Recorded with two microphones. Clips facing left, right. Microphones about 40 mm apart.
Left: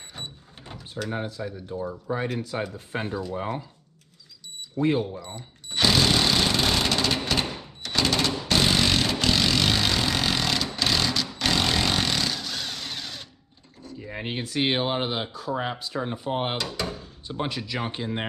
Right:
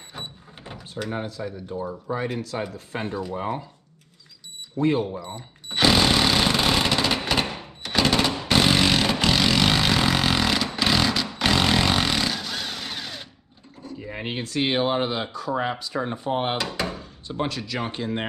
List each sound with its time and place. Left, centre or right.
0.1 s a sound: centre
1.1 s speech: centre
2.1 s speech: centre
3.1 s speech: centre
4.7 s speech: centre
5.1 s sewing machine: centre
7.8 s a sound: centre
11.3 s vehicle: centre
13.8 s a sound: centre
14.4 s speech: centre
16.6 s speech: right
17.3 s speech: centre